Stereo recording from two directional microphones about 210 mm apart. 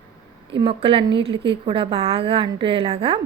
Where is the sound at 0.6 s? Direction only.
25° right (ahead or behind).